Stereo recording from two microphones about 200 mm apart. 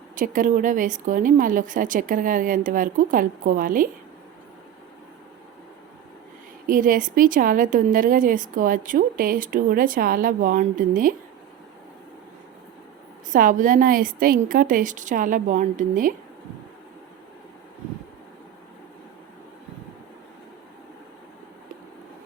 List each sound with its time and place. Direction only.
0.2 s a woman's voice: 40° right (ahead or behind)
6.7 s a woman's voice: 40° right (ahead or behind)
13.3 s a woman's voice: 40° right (ahead or behind)